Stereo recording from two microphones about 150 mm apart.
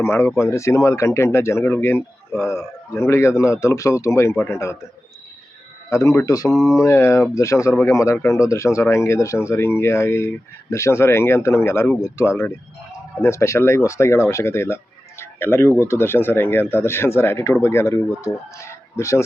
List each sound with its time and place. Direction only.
0.0 s speech: 15° left (ahead or behind)
5.9 s speech: 20° left (ahead or behind)
6.5 s speech: centre (ahead or behind)
6.8 s speech: 20° left (ahead or behind)